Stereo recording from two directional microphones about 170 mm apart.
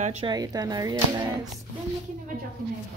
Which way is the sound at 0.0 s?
40° right (ahead or behind).